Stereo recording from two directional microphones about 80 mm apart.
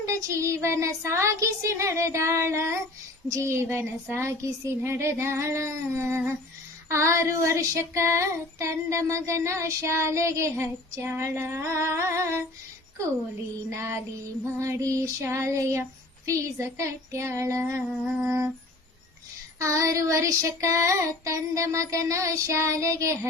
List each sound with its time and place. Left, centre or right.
0.0 s child singing: right
13.7 s child singing: right
19.5 s child singing: right